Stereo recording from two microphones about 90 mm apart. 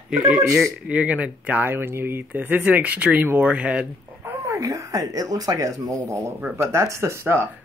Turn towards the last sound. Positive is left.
turn(degrees=-30)  # may be behind; listen again after turning